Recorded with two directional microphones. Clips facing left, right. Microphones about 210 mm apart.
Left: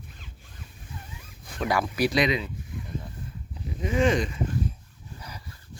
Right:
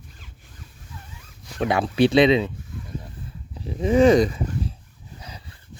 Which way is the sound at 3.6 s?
35° right (ahead or behind).